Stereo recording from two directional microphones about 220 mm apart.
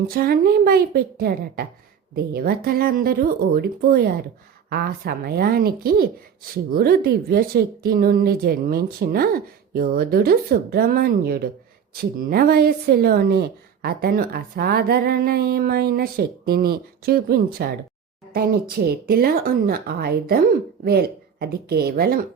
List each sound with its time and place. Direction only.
0.1 s a woman's voice: 45° right (ahead or behind)